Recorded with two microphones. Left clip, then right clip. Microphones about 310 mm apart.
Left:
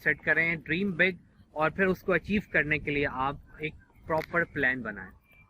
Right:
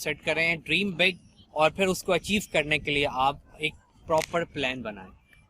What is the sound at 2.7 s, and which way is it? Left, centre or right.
Speech, right.